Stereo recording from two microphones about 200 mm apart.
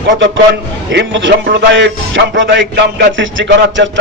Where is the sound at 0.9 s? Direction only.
65° right (ahead or behind).